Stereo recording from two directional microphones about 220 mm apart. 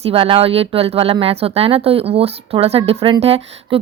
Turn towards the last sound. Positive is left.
turn(degrees=-25)  # may be behind; listen again after turning